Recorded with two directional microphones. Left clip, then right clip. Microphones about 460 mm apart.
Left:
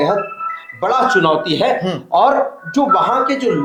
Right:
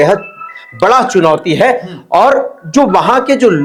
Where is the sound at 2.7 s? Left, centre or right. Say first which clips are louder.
Right 5 dB; right.